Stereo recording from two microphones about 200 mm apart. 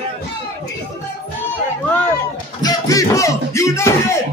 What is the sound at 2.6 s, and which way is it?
Music, 15° left (ahead or behind).